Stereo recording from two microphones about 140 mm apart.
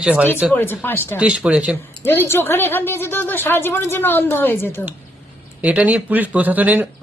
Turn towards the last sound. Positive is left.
turn(degrees=-10)  # may be behind; listen again after turning